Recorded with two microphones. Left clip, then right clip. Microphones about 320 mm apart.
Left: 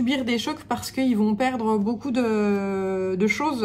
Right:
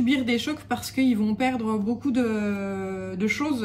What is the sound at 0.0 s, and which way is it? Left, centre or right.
A woman's voice, centre.